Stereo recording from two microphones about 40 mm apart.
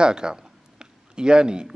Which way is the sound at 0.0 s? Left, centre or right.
Right.